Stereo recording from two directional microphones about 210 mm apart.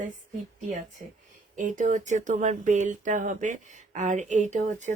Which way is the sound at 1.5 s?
35° right (ahead or behind).